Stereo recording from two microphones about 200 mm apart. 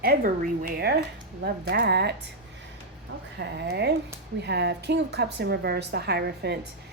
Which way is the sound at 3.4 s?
55° right (ahead or behind).